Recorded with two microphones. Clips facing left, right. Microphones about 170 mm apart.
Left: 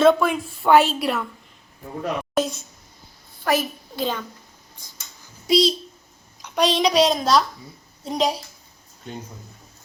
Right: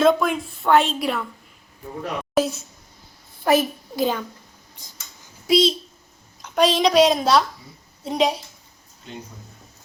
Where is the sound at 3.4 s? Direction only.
15° right (ahead or behind).